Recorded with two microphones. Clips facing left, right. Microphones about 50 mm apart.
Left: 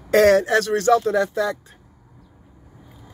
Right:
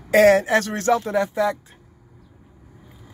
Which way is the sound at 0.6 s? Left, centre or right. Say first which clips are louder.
Left 6 dB; right.